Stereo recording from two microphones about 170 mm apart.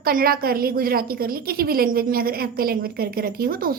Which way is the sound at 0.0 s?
60° right (ahead or behind).